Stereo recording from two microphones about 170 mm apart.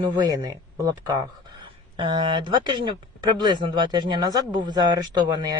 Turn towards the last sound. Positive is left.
turn(degrees=-25)  # may be behind; listen again after turning